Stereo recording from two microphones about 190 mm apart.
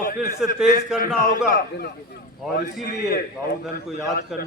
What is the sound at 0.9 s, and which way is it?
Speech, 45° left (ahead or behind).